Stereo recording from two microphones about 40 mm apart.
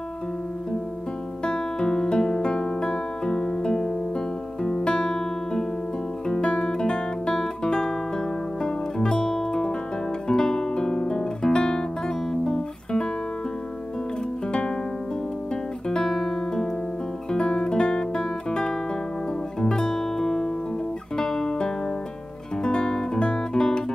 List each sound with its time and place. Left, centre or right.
1.4 s music: left
6.2 s guitar: centre
12.3 s music: centre
15.9 s guitar: centre
16.2 s piano: centre
17.3 s guitar: centre
19.6 s music: centre
21.2 s guitar: centre